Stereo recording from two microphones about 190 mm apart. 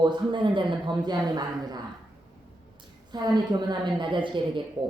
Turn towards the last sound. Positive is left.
turn(degrees=-25)  # may be behind; listen again after turning